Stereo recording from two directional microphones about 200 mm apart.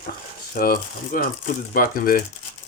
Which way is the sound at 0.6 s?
45° left (ahead or behind).